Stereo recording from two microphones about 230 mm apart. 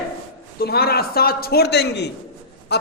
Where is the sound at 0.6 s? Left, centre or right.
Left.